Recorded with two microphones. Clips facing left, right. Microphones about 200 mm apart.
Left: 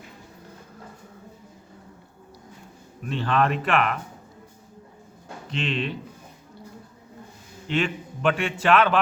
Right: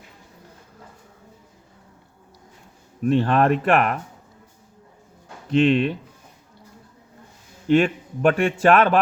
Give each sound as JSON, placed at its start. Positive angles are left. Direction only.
{"t": 3.1, "sound": "a man's voice", "side_deg": -50}
{"t": 5.5, "sound": "a man's voice", "side_deg": -50}
{"t": 7.7, "sound": "a man's voice", "side_deg": -50}